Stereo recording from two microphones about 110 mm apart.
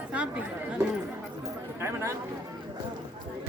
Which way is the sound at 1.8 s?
25° right (ahead or behind).